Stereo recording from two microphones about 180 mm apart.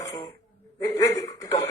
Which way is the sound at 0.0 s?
20° left (ahead or behind).